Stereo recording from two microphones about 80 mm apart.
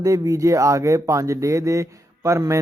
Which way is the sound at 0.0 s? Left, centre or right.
Right.